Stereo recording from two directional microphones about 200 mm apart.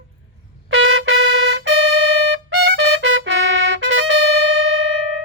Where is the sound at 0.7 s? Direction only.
75° right (ahead or behind).